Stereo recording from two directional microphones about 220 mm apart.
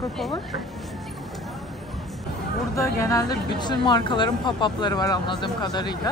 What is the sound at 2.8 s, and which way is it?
A woman's voice, 15° left (ahead or behind).